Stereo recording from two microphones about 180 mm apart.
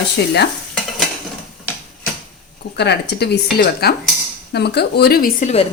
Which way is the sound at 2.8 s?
65° left (ahead or behind).